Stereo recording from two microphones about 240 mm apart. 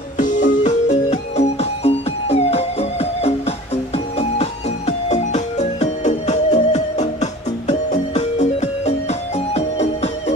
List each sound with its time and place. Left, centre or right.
0.2 s music: left